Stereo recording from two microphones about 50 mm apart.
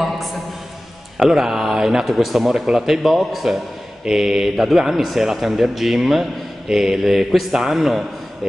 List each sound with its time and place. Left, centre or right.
1.2 s a man's voice: centre